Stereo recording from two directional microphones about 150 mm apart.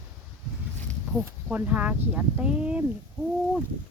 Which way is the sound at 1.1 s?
Centre (ahead or behind).